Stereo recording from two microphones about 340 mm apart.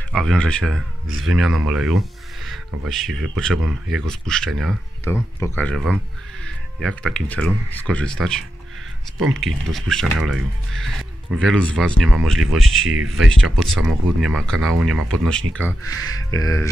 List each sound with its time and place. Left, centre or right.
0.1 s speech: centre
12.8 s speech: right
13.2 s speech: centre